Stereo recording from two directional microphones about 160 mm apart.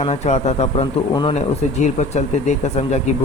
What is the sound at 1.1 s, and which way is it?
Speech, 30° left (ahead or behind).